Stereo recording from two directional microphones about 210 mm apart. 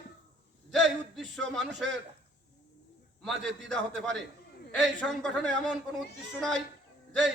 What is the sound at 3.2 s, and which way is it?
Speech, centre (ahead or behind).